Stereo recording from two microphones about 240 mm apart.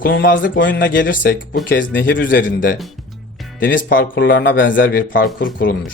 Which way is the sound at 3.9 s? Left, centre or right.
Left.